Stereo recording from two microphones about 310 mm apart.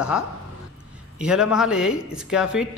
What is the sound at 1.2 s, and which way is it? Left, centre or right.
A man's voice, centre.